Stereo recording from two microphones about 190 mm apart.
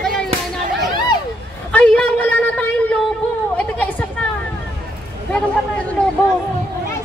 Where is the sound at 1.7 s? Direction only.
10° left (ahead or behind).